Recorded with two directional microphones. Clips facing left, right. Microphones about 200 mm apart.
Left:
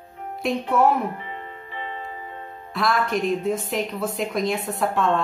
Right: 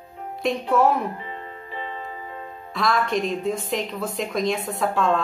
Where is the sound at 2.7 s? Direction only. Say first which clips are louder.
Even; centre (ahead or behind).